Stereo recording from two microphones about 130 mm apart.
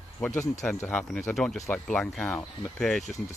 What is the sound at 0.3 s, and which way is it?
Speech, 25° left (ahead or behind).